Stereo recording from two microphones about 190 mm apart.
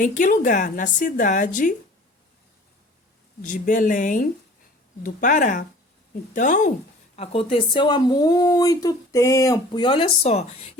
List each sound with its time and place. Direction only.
0.0 s a woman's voice: 45° left (ahead or behind)
3.4 s a woman's voice: 45° left (ahead or behind)
7.2 s speech: 30° left (ahead or behind)